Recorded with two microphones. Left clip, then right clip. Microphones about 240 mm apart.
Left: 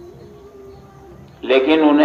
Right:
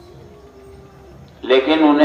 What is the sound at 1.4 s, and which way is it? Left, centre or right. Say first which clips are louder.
Speech: even; left.